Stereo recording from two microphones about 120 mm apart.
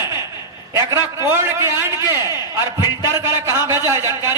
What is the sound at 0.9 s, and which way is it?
A man's voice, 25° right (ahead or behind).